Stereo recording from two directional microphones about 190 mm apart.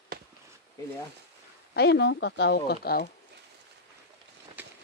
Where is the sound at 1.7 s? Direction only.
60° left (ahead or behind).